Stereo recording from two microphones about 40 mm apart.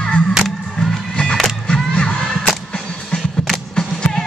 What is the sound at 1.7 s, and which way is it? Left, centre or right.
Crowd, left.